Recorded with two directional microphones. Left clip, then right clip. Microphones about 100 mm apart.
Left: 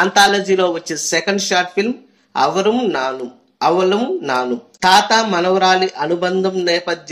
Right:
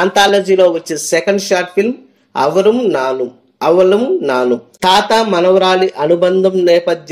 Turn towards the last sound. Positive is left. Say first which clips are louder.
# right 7 dB
turn(degrees=-25)  # may be behind; listen again after turning